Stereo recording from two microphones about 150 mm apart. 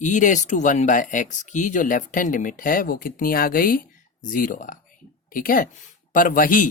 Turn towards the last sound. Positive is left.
turn(degrees=65)  # may be behind; listen again after turning